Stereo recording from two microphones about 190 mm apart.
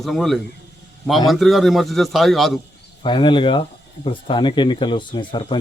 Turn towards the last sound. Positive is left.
turn(degrees=25)  # may be behind; listen again after turning